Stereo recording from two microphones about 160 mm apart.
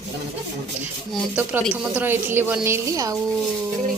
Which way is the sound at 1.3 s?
10° right (ahead or behind).